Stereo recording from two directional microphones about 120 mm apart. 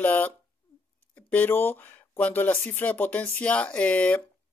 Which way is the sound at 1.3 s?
15° left (ahead or behind).